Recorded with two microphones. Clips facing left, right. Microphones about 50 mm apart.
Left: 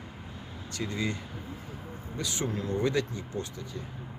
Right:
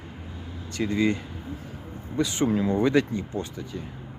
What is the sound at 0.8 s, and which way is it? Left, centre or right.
Speech, right.